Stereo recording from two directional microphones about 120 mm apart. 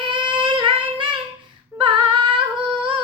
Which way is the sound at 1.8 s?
45° right (ahead or behind).